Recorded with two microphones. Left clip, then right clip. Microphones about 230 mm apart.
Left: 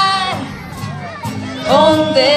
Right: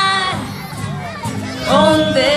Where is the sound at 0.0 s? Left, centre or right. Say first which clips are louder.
Left 1 dB; left.